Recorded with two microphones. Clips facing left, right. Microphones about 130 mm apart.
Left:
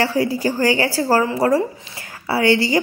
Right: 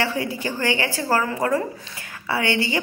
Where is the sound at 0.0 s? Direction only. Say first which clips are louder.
Left 6 dB; 40° left (ahead or behind).